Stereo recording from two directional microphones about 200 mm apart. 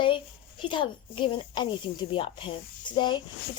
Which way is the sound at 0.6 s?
25° left (ahead or behind).